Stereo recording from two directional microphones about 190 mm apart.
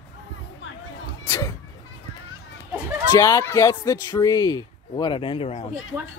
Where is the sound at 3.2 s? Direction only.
15° left (ahead or behind); by 5.7 s 35° left (ahead or behind).